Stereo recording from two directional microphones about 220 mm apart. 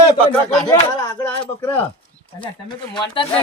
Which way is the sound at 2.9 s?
25° left (ahead or behind).